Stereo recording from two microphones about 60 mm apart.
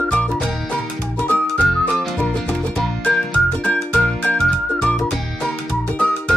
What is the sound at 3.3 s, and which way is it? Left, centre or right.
Music, left.